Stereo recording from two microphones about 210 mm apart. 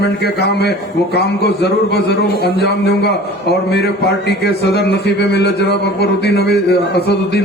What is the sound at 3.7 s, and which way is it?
A man's voice, 50° left (ahead or behind).